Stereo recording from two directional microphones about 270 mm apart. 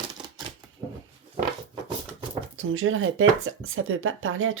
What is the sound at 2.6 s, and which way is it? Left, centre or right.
Speech, right.